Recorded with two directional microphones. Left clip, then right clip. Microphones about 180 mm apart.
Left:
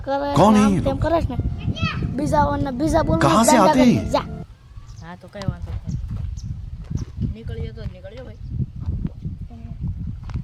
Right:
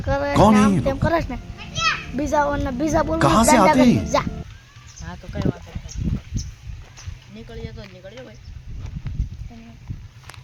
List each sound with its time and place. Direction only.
0.0 s a woman's voice: 35° left (ahead or behind)
0.3 s speech: centre (ahead or behind)
1.0 s a woman's voice: 40° left (ahead or behind)
1.5 s children playing: 25° right (ahead or behind)
2.1 s a woman's voice: 35° left (ahead or behind)
3.2 s speech: centre (ahead or behind)
7.6 s speech: centre (ahead or behind)